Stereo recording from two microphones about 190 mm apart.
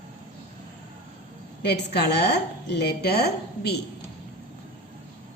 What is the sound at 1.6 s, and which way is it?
Speech, 60° left (ahead or behind).